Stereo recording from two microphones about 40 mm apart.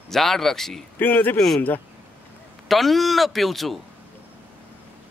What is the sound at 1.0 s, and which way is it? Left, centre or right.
Speech, left.